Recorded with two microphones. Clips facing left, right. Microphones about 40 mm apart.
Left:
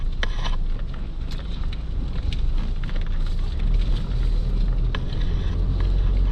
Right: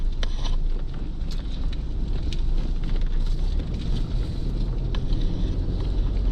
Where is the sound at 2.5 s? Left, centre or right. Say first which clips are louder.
Even; left.